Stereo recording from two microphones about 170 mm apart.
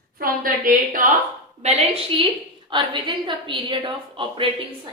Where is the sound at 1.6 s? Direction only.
40° right (ahead or behind).